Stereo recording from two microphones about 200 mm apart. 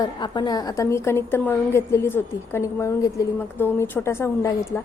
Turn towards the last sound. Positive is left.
turn(degrees=15)  # may be behind; listen again after turning